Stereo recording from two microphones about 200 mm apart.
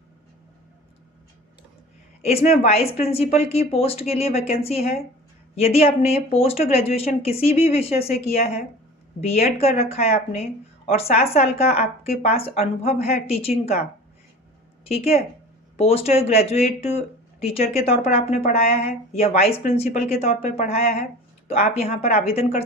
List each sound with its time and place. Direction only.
2.2 s speech: 30° left (ahead or behind)
14.9 s speech: 30° left (ahead or behind)